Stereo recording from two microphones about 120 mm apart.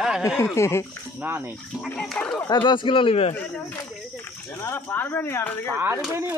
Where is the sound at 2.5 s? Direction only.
40° left (ahead or behind).